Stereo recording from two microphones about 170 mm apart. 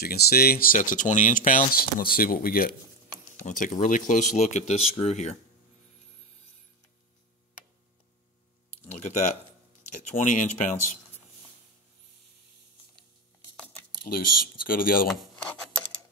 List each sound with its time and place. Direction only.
0.0 s speech: 65° left (ahead or behind); by 5.4 s 40° left (ahead or behind)
9.0 s speech: 40° left (ahead or behind)
14.0 s speech: 60° left (ahead or behind)
15.0 s filing: 5° left (ahead or behind)